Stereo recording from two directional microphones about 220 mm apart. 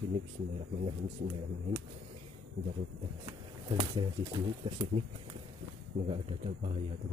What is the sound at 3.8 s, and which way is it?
Speech, 20° right (ahead or behind).